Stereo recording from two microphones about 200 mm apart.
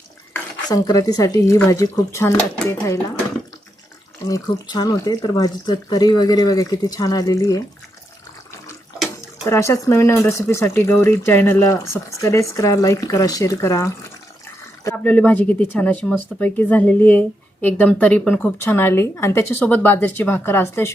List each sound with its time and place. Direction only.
0.7 s speech: 20° left (ahead or behind)
4.3 s speech: 15° left (ahead or behind)
9.5 s speech: 15° left (ahead or behind)
14.9 s speech: 5° left (ahead or behind)